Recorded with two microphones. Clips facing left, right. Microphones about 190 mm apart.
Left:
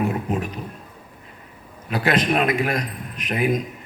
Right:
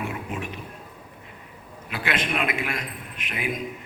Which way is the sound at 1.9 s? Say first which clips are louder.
Left 7 dB; 40° left (ahead or behind).